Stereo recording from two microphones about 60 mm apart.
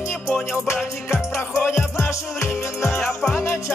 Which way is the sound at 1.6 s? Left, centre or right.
Left.